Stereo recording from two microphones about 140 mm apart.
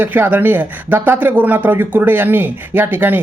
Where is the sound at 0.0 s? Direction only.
10° right (ahead or behind).